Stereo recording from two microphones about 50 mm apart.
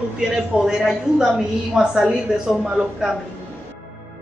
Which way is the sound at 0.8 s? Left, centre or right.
Centre.